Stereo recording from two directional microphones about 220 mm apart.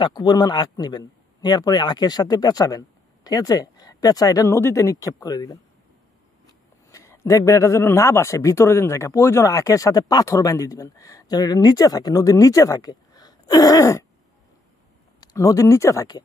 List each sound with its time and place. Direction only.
0.0 s a man's voice: 20° left (ahead or behind)
6.9 s a man's voice: 15° left (ahead or behind)
15.1 s speech: 15° left (ahead or behind)